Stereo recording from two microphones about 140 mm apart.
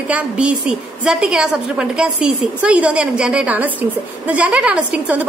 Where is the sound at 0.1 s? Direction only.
10° right (ahead or behind).